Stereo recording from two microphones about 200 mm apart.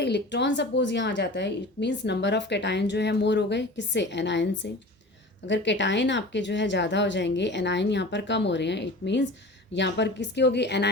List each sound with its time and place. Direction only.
0.0 s speech: 60° left (ahead or behind)